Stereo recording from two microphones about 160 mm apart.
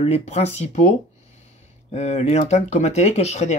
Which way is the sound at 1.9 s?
45° left (ahead or behind).